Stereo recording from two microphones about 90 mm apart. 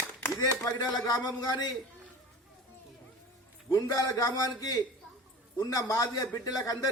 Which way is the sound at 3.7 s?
40° left (ahead or behind).